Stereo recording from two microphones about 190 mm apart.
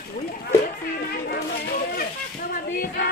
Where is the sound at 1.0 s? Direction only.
55° left (ahead or behind).